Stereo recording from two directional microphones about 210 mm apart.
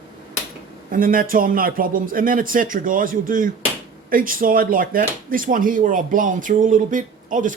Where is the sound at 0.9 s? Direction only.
40° right (ahead or behind).